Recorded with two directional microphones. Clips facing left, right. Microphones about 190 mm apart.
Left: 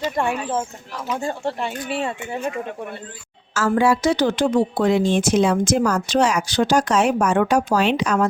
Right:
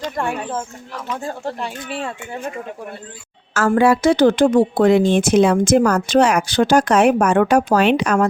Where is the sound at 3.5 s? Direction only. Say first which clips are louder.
Right 3 dB; 55° right (ahead or behind).